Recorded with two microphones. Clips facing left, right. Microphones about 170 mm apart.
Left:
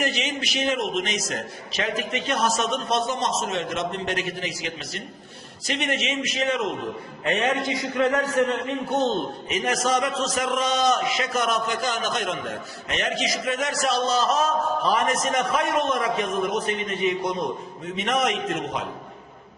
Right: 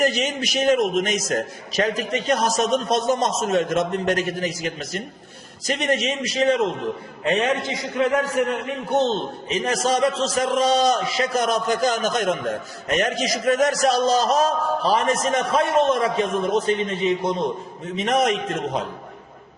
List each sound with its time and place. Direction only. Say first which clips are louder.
0.0 s a man's voice: right 5 dB; 45° right (ahead or behind)